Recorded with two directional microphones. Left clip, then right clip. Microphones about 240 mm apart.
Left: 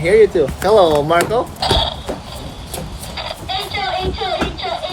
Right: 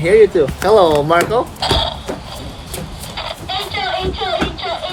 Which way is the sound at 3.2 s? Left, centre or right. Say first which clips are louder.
Even; centre.